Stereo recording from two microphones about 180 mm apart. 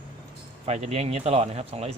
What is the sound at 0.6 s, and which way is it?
Speech, 35° right (ahead or behind).